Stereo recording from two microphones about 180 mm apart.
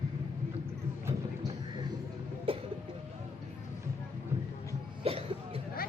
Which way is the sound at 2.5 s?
30° right (ahead or behind).